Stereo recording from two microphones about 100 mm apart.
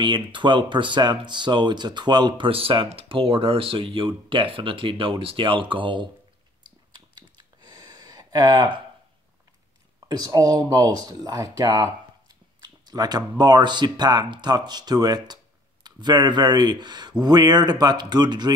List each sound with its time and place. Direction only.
0.0 s speech: 50° right (ahead or behind)
6.9 s a sound: 45° right (ahead or behind)
10.0 s speech: 40° right (ahead or behind)